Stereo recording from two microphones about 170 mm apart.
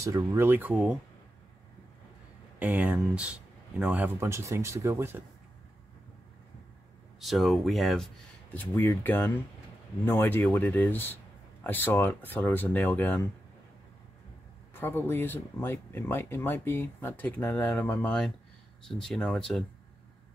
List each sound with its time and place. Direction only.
0.0 s speech: 20° right (ahead or behind)
2.6 s speech: 10° right (ahead or behind)
7.2 s speech: centre (ahead or behind)
8.7 s speech: 10° left (ahead or behind)
14.7 s speech: 15° left (ahead or behind)